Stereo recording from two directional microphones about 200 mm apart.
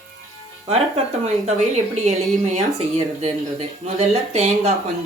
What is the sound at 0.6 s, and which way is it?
Speech, 35° right (ahead or behind).